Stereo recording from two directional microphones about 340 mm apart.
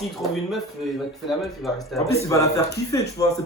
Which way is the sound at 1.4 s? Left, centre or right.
Centre.